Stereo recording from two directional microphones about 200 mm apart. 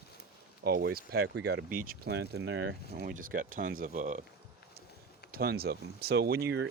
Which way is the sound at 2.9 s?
40° right (ahead or behind).